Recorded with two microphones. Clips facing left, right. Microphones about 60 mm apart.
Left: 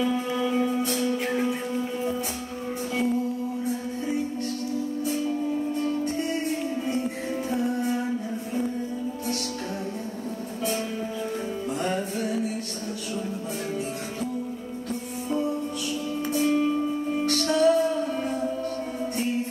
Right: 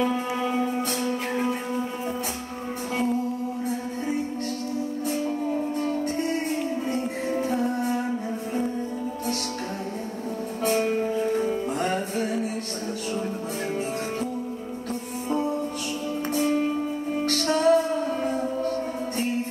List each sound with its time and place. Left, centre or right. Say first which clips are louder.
0.0 s music: even; right
5.8 s music: even; right
7.6 s music: right 1 dB; right
10.7 s music: right 9 dB; right
16.3 s music: left 1 dB; right